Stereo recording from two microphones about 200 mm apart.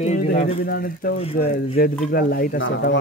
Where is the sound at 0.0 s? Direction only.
40° left (ahead or behind).